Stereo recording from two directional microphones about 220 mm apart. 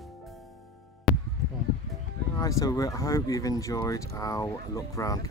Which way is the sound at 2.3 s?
15° left (ahead or behind).